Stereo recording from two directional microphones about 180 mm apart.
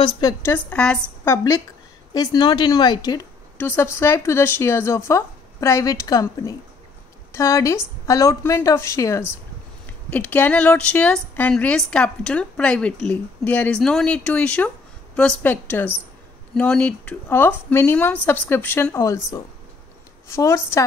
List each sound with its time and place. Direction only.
0.0 s a woman's voice: 20° left (ahead or behind)